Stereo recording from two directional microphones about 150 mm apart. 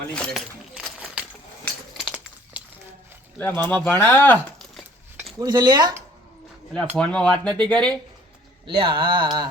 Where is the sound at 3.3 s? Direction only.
10° left (ahead or behind).